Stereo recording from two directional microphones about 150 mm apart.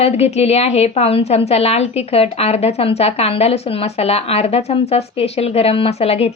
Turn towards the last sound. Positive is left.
turn(degrees=40)  # may be behind; listen again after turning